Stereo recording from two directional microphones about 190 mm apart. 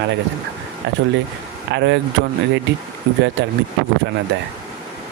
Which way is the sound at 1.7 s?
70° right (ahead or behind).